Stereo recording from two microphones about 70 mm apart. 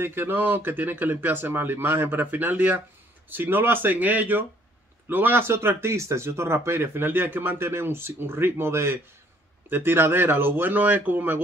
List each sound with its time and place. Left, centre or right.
0.0 s speech: right